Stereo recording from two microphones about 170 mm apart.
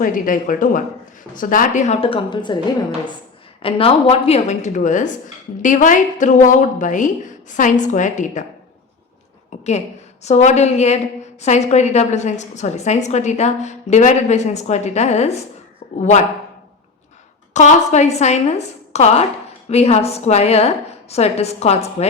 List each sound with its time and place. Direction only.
0.0 s a woman's voice: 50° left (ahead or behind); by 2.6 s 25° left (ahead or behind)
3.6 s a woman's voice: 35° left (ahead or behind)
9.5 s a sound: 40° left (ahead or behind)
10.2 s a woman's voice: 40° left (ahead or behind)
17.5 s a woman's voice: 45° left (ahead or behind)